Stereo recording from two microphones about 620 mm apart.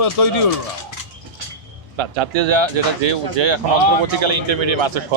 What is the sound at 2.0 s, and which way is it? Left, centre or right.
Speech, right.